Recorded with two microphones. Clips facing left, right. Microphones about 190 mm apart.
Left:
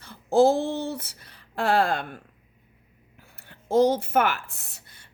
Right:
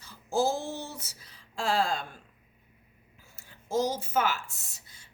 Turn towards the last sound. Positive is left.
turn(degrees=60)  # may be behind; listen again after turning